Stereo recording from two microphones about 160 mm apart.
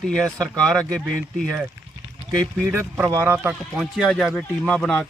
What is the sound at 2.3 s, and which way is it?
Speech, 5° left (ahead or behind).